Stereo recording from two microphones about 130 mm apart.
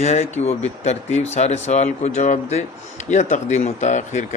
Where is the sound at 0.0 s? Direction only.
60° left (ahead or behind).